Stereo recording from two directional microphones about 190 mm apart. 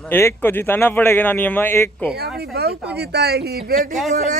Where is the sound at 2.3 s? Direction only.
55° right (ahead or behind).